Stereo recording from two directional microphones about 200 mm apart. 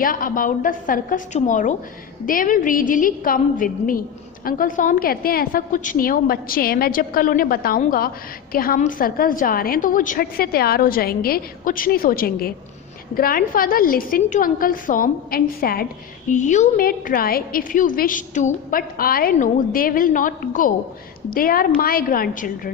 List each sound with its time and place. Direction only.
0.0 s a woman's voice: 45° left (ahead or behind)